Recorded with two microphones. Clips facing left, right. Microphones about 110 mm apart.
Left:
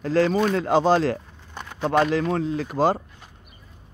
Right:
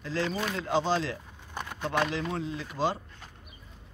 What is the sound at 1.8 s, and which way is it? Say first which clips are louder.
Speech: left 9 dB; 50° left (ahead or behind).